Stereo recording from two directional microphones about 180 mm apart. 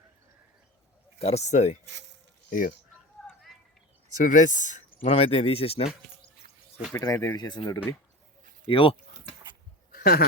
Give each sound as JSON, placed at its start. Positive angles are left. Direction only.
{"t": 1.2, "sound": "speech", "side_deg": 35}
{"t": 1.8, "sound": "speech", "side_deg": -80}
{"t": 2.5, "sound": "speech", "side_deg": 50}
{"t": 3.2, "sound": "a sound", "side_deg": 0}
{"t": 4.1, "sound": "speech", "side_deg": 45}
{"t": 5.0, "sound": "speech", "side_deg": 30}
{"t": 6.9, "sound": "speech", "side_deg": 15}
{"t": 9.9, "sound": "a sound", "side_deg": 55}